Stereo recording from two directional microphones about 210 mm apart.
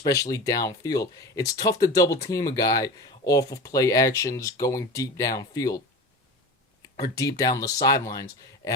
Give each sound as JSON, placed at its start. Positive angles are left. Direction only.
{"t": 0.0, "sound": "speech", "side_deg": 15}
{"t": 6.8, "sound": "speech", "side_deg": 15}